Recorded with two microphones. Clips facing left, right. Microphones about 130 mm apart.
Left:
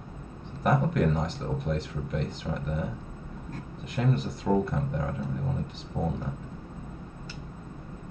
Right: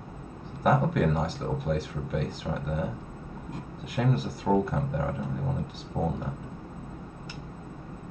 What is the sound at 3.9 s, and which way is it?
Speech, 5° right (ahead or behind).